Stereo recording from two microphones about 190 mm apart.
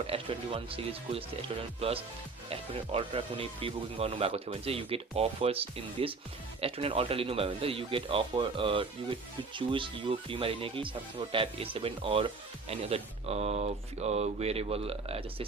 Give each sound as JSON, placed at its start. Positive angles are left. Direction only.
{"t": 0.1, "sound": "speech", "side_deg": -30}